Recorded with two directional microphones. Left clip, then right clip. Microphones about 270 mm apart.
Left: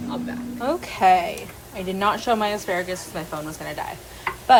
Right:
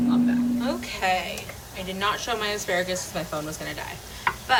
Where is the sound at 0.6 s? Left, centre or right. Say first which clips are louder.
Left 7 dB; centre.